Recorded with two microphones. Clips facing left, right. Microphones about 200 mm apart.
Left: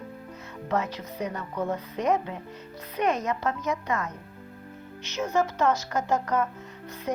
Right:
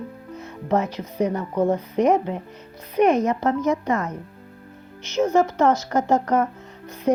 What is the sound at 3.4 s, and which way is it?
Speech, 30° right (ahead or behind).